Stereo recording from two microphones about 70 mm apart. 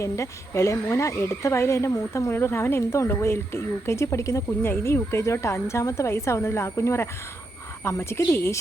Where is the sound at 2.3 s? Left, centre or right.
Left.